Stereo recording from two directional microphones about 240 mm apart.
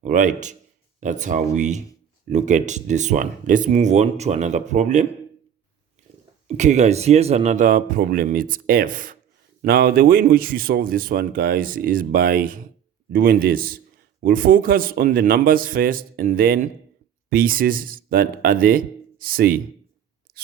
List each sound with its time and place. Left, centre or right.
0.0 s a man's voice: right
6.6 s a man's voice: right